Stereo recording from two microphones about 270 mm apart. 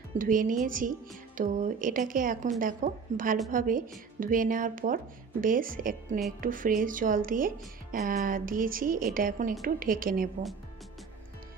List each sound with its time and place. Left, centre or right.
0.2 s speech: right